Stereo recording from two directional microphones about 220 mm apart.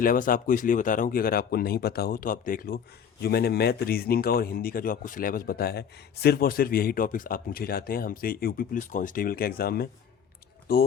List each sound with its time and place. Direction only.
0.0 s speech: 40° left (ahead or behind)